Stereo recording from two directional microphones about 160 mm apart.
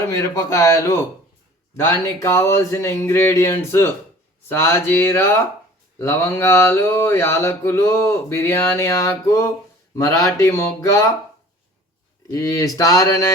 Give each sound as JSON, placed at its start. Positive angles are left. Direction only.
{"t": 0.1, "sound": "speech", "side_deg": 20}
{"t": 1.7, "sound": "mantra", "side_deg": 15}
{"t": 9.9, "sound": "speech", "side_deg": 20}
{"t": 12.3, "sound": "speech", "side_deg": 20}